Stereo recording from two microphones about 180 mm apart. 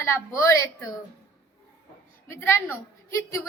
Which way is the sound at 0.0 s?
15° left (ahead or behind).